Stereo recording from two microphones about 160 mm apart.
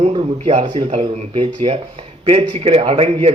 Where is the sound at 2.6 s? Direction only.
40° right (ahead or behind).